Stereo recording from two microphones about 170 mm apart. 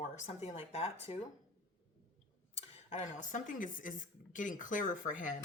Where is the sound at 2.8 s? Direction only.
45° left (ahead or behind).